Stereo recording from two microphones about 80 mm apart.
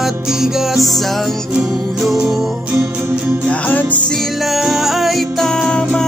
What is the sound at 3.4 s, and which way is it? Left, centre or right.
Music, centre.